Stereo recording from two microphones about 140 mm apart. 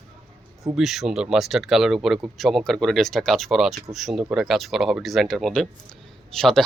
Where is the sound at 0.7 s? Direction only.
Centre (ahead or behind).